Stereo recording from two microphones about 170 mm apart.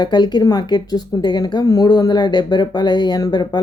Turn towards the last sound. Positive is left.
turn(degrees=25)  # may be behind; listen again after turning